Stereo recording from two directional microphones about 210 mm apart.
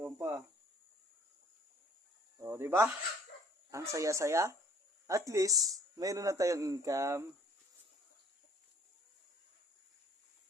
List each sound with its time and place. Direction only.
0.0 s speech: 15° right (ahead or behind)
2.4 s speech: 10° right (ahead or behind)